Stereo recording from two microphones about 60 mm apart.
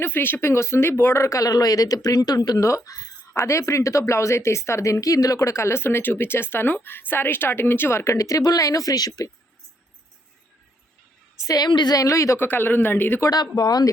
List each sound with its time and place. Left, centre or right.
0.0 s speech: left
2.6 s a woman's voice: left
3.3 s speech: left
11.4 s a woman's voice: left
12.4 s speech: left
13.3 s speech: left